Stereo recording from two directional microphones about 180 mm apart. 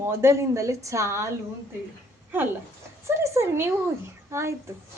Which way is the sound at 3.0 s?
15° right (ahead or behind).